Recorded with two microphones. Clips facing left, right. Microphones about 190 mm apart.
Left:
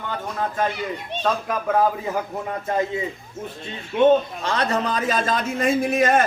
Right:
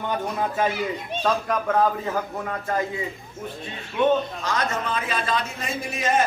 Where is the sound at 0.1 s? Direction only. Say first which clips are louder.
Right 1 dB; 5° right (ahead or behind).